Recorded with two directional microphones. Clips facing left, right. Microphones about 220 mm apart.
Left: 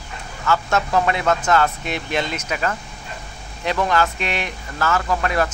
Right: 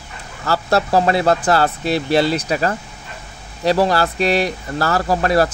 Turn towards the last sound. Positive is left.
turn(degrees=-35)  # may be behind; listen again after turning